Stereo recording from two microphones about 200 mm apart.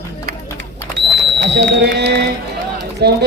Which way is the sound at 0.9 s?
55° right (ahead or behind).